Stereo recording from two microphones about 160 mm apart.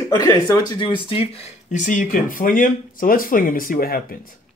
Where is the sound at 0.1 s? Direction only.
20° left (ahead or behind); by 4.2 s 65° left (ahead or behind).